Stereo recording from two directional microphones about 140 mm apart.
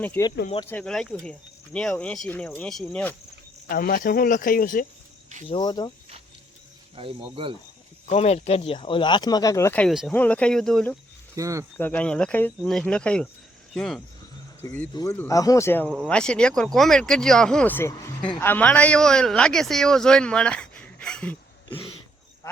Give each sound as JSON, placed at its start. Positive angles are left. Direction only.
{"t": 0.2, "sound": "speech", "side_deg": 15}
{"t": 3.7, "sound": "speech", "side_deg": 90}
{"t": 5.5, "sound": "speech", "side_deg": 30}
{"t": 6.9, "sound": "speech", "side_deg": -35}
{"t": 8.1, "sound": "speech", "side_deg": 50}
{"t": 10.1, "sound": "speech", "side_deg": 10}
{"t": 11.3, "sound": "speech", "side_deg": -25}
{"t": 11.8, "sound": "speech", "side_deg": 10}
{"t": 14.6, "sound": "speech", "side_deg": 15}
{"t": 14.9, "sound": "speech", "side_deg": 25}